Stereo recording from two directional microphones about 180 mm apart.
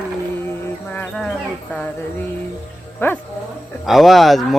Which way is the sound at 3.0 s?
10° left (ahead or behind).